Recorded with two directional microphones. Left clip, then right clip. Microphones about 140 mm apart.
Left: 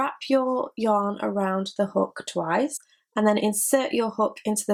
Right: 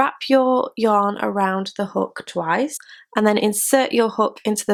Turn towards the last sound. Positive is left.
turn(degrees=-35)  # may be behind; listen again after turning